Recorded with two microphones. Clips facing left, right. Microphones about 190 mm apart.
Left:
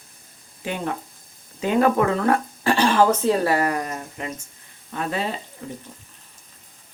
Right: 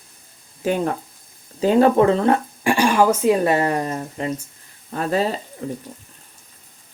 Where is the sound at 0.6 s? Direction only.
40° right (ahead or behind).